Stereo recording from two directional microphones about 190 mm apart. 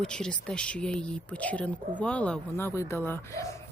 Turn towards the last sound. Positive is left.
turn(degrees=15)  # may be behind; listen again after turning